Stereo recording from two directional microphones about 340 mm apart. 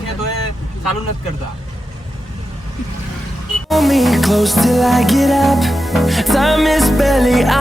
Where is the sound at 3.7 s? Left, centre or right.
Centre.